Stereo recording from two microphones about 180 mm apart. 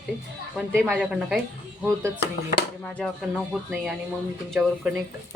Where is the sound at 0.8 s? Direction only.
Centre (ahead or behind).